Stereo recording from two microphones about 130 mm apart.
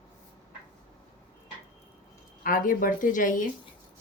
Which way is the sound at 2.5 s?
90° left.